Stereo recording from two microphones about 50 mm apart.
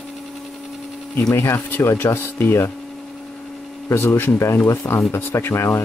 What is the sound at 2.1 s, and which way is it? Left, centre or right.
Speech, left.